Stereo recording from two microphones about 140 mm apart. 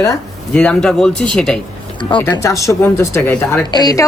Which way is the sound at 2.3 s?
20° left (ahead or behind).